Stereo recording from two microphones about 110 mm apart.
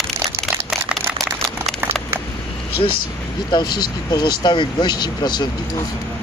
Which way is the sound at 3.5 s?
45° left (ahead or behind).